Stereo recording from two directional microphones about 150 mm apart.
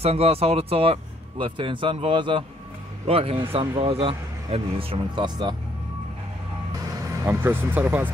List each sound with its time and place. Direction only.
0.0 s speech: 40° right (ahead or behind)
7.2 s speech: 15° right (ahead or behind)